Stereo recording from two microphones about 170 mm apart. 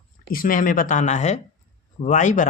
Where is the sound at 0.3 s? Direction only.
55° left (ahead or behind).